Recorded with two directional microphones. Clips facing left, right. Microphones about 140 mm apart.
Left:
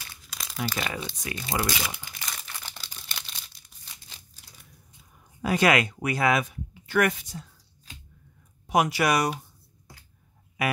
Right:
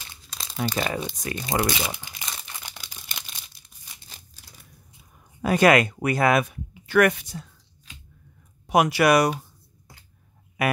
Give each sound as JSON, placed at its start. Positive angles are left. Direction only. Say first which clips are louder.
{"t": 0.0, "sound": "crumpling", "louder": "right 1 dB", "side_deg": -25}
{"t": 1.2, "sound": "speech", "louder": "right 3 dB", "side_deg": -45}
{"t": 1.6, "sound": "crumpling", "louder": "right 4 dB", "side_deg": -25}
{"t": 5.4, "sound": "speech", "louder": "right 4 dB", "side_deg": -50}
{"t": 6.9, "sound": "speech", "louder": "right 5 dB", "side_deg": -65}
{"t": 8.6, "sound": "speech", "louder": "right 4 dB", "side_deg": -70}